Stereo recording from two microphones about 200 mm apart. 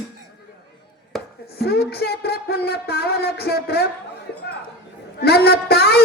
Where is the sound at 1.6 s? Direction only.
50° left (ahead or behind).